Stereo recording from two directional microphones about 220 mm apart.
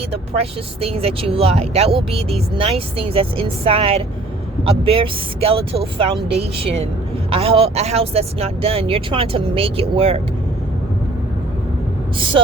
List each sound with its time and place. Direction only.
0.1 s speech: 25° right (ahead or behind)
12.1 s speech: 25° right (ahead or behind)